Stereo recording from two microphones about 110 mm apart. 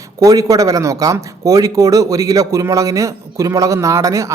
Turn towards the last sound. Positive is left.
turn(degrees=-30)  # may be behind; listen again after turning